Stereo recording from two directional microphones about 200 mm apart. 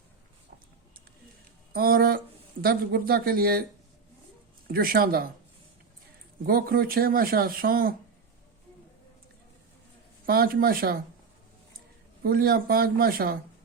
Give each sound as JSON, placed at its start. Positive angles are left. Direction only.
{"t": 1.7, "sound": "speech", "side_deg": -45}
{"t": 4.7, "sound": "speech", "side_deg": -45}
{"t": 6.4, "sound": "speech", "side_deg": -45}
{"t": 10.2, "sound": "speech", "side_deg": -45}
{"t": 12.2, "sound": "speech", "side_deg": -50}